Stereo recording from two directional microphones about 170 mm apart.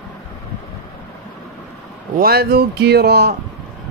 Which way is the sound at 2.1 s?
65° right (ahead or behind).